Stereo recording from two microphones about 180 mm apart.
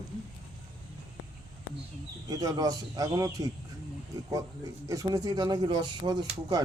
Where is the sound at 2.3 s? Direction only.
20° right (ahead or behind).